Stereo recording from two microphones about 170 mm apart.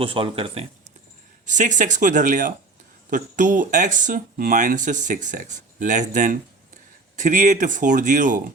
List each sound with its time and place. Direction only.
0.0 s speech: 30° right (ahead or behind)
1.5 s speech: 45° right (ahead or behind)